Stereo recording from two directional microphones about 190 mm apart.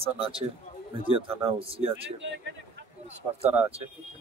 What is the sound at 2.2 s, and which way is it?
Speech, 70° right (ahead or behind).